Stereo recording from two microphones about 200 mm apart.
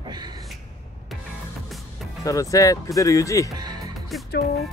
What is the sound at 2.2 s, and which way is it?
Speech, 15° left (ahead or behind).